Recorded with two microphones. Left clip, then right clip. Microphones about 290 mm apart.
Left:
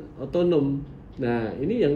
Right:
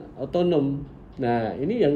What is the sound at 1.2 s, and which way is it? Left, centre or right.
Speech, centre.